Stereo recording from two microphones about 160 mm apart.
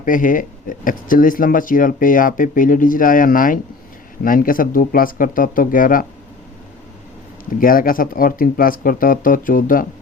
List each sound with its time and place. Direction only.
0.0 s speech: 55° left (ahead or behind)
7.6 s speech: 60° left (ahead or behind)